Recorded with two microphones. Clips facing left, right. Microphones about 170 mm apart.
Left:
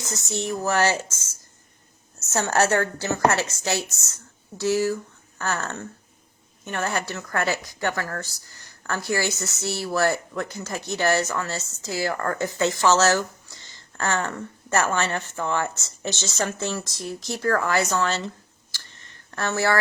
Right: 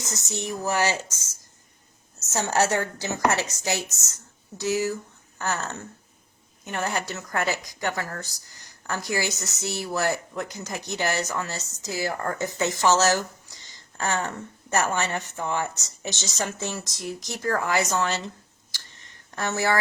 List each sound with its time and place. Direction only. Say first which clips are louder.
0.0 s a woman's voice: left 3 dB; 20° right (ahead or behind)
2.3 s a woman's voice: left 2 dB; 15° right (ahead or behind)
18.7 s a sound: left 1 dB; 15° right (ahead or behind)